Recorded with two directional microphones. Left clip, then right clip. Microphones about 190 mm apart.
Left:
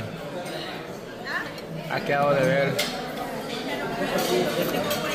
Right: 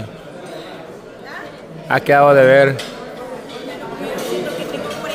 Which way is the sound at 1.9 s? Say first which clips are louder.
Right 12 dB; 65° right (ahead or behind).